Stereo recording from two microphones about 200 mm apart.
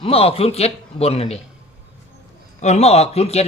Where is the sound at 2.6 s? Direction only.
35° left (ahead or behind).